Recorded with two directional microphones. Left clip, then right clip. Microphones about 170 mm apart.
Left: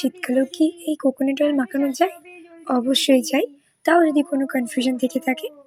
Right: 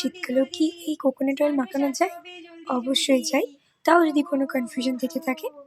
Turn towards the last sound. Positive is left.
turn(degrees=15)  # may be behind; listen again after turning